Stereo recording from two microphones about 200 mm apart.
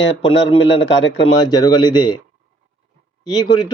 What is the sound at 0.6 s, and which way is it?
Speech, 70° left (ahead or behind).